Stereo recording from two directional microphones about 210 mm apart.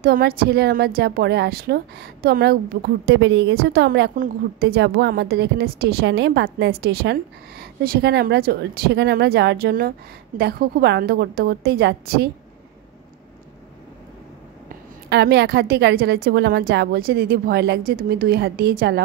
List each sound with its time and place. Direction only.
0.0 s a woman's voice: 45° right (ahead or behind)
4.1 s a woman's voice: 45° right (ahead or behind)
15.0 s a woman's voice: 55° right (ahead or behind)